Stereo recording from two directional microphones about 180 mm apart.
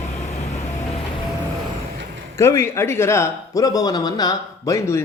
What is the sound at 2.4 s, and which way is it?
Speech, 15° left (ahead or behind).